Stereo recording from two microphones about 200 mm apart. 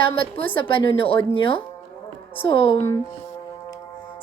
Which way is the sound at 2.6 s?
25° left (ahead or behind).